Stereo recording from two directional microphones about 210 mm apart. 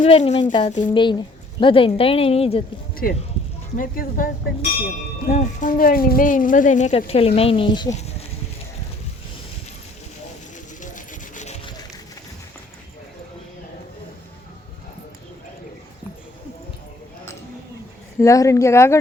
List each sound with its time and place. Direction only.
0.0 s speech: 30° left (ahead or behind)
0.8 s speech: 20° left (ahead or behind)
2.9 s speech: 45° left (ahead or behind)
10.8 s rub: 35° left (ahead or behind)
18.2 s speech: 15° left (ahead or behind)